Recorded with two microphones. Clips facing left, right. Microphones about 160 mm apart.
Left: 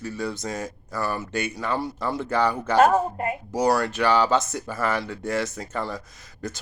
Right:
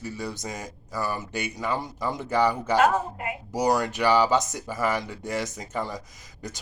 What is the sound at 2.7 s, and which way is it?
Speech, 40° left (ahead or behind).